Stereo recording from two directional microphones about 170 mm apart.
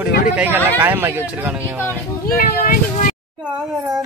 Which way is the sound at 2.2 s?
60° left (ahead or behind).